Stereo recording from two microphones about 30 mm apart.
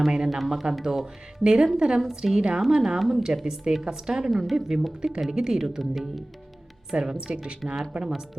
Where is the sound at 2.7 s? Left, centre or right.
Right.